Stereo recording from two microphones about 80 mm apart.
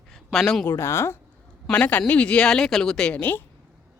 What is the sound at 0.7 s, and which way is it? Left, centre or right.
Speech, left.